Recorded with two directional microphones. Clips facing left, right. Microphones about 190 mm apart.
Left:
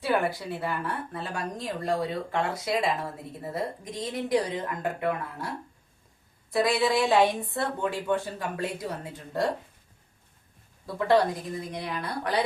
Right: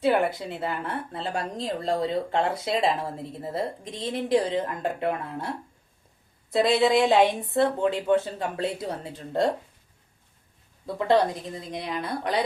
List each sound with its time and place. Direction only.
0.0 s speech: 20° right (ahead or behind)
6.5 s speech: 25° right (ahead or behind)
10.8 s speech: 20° right (ahead or behind)